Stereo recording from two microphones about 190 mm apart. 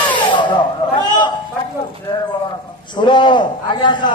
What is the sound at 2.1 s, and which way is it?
A man's voice, 25° left (ahead or behind).